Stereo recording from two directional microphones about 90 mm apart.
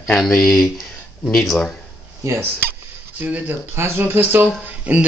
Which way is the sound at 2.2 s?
30° right (ahead or behind).